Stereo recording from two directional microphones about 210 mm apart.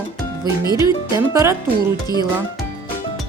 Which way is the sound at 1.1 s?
15° right (ahead or behind).